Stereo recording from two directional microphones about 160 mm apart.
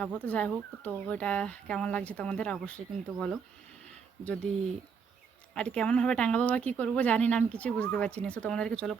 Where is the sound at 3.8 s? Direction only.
5° left (ahead or behind).